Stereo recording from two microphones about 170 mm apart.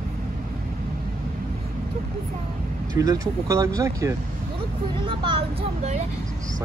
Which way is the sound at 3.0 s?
20° right (ahead or behind).